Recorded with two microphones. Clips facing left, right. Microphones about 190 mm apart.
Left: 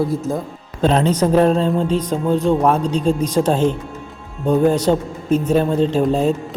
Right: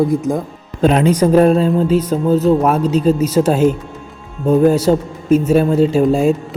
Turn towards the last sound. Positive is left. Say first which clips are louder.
# right 4 dB
turn(degrees=-10)  # may be behind; listen again after turning